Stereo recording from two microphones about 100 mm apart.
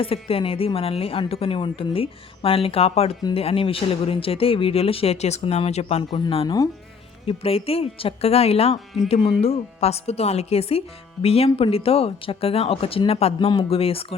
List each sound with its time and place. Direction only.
0.0 s speech: 70° left (ahead or behind); by 3.2 s 90° left
3.3 s speech: 70° left (ahead or behind); by 6.0 s 90° left
6.0 s speech: 50° left (ahead or behind)
7.3 s speech: 75° left (ahead or behind); by 13.5 s 90° left
13.6 s speech: 70° left (ahead or behind)